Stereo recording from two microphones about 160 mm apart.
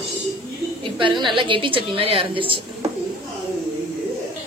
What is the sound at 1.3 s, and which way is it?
A woman's voice, 30° right (ahead or behind).